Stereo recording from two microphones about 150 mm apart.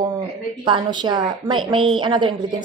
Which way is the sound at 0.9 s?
30° right (ahead or behind).